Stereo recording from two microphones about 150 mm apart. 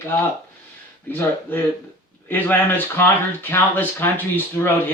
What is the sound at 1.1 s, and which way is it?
Speech, 15° left (ahead or behind).